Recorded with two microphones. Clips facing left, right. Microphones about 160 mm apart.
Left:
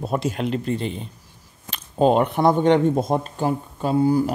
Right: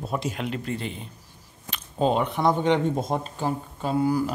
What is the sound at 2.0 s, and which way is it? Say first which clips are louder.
Speech: left 5 dB; 55° left (ahead or behind).